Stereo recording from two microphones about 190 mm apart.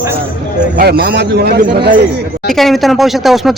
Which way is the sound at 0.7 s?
55° right (ahead or behind).